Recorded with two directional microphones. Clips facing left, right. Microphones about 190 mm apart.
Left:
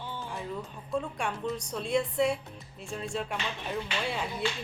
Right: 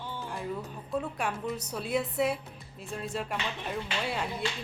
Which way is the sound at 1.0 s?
5° right (ahead or behind).